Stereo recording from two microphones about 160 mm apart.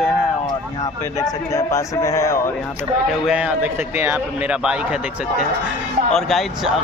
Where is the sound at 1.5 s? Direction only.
20° left (ahead or behind).